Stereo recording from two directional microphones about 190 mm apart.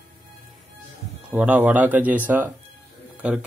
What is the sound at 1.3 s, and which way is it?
Speech, 10° right (ahead or behind).